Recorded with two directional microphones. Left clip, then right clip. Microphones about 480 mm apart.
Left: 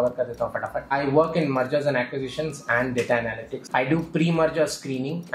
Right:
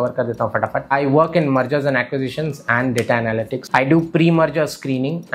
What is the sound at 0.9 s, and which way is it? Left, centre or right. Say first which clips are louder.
Speech: right 5 dB; right.